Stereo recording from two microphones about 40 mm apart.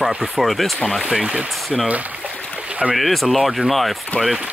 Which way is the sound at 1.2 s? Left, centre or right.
Right.